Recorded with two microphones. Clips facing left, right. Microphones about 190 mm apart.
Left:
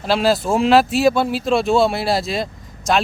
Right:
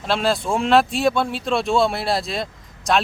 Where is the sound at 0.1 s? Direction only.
Centre (ahead or behind).